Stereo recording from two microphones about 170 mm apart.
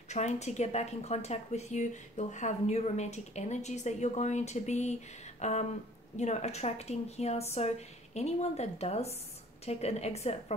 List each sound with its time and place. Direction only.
0.1 s speech: 40° left (ahead or behind)